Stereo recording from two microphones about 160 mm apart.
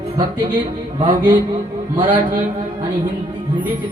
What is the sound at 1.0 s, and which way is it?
Music, 35° right (ahead or behind).